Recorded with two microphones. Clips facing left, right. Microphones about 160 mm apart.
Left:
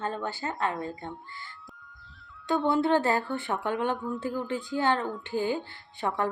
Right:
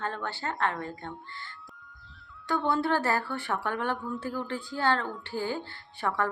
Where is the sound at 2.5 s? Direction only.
20° left (ahead or behind).